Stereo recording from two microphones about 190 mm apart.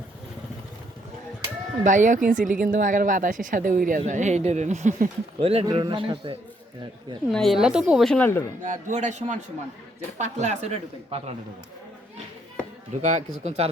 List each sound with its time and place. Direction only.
1.8 s a woman's voice: 40° right (ahead or behind); by 6.3 s 25° right (ahead or behind)
7.3 s a woman's voice: centre (ahead or behind)
8.6 s speech: 40° right (ahead or behind)
13.0 s speech: 40° right (ahead or behind)